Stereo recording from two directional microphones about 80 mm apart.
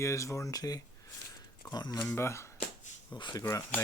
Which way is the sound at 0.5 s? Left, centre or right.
Left.